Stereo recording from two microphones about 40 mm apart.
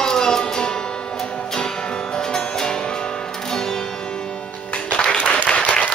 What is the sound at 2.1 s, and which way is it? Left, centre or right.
Music, centre.